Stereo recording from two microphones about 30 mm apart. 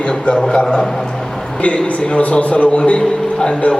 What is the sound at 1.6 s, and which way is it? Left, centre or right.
A man's voice, left.